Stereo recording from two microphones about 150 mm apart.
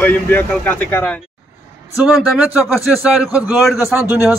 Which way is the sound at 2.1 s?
5° right (ahead or behind).